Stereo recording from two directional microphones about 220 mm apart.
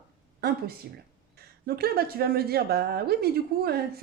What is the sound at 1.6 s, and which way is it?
Speech, 45° right (ahead or behind).